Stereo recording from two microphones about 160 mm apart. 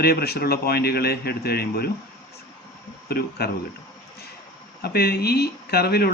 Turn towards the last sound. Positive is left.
turn(degrees=75)  # may be behind; listen again after turning